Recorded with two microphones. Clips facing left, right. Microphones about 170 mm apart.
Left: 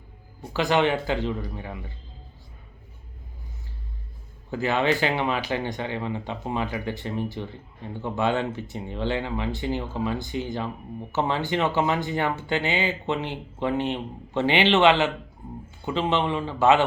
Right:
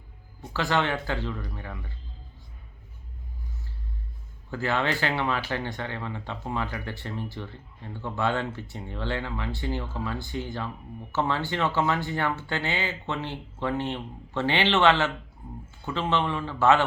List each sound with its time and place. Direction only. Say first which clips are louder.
0.4 s speech: left 4 dB; 15° left (ahead or behind)
4.5 s speech: left 4 dB; 15° left (ahead or behind)